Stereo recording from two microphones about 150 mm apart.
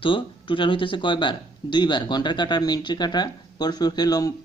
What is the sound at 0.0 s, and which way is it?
Speech, 35° left (ahead or behind).